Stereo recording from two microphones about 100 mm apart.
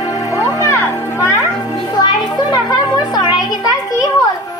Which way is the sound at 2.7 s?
40° left (ahead or behind).